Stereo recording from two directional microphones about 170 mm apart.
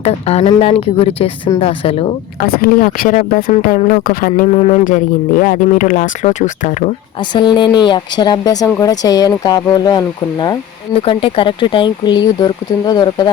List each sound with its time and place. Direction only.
0.0 s speech: 40° left (ahead or behind)
2.4 s speech: 60° left (ahead or behind)
4.4 s speech: 35° left (ahead or behind)
4.9 s speech: 50° left (ahead or behind)
7.2 s speech: 25° left (ahead or behind)